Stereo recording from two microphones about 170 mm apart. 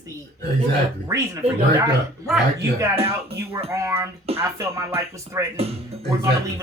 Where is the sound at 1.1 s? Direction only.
20° right (ahead or behind).